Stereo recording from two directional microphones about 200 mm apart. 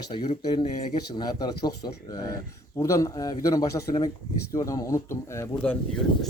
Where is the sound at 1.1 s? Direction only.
20° left (ahead or behind).